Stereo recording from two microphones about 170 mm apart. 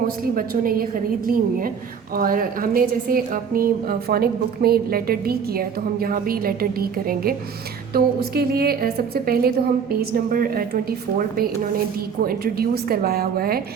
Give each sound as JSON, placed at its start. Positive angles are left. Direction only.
{"t": 0.3, "sound": "a woman's voice", "side_deg": -55}